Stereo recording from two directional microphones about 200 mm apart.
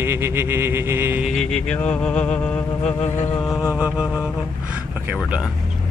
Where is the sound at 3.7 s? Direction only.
5° right (ahead or behind).